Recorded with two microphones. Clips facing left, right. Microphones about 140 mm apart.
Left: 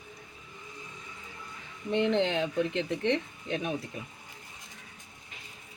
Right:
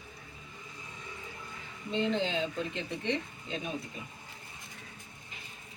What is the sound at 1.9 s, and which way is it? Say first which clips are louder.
Speech: left 4 dB; 65° left (ahead or behind).